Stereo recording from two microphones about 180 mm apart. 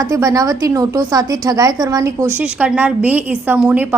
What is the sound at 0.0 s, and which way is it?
A woman's voice, 20° right (ahead or behind).